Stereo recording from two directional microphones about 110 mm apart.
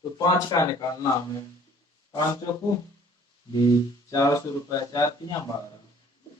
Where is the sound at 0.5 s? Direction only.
40° left (ahead or behind).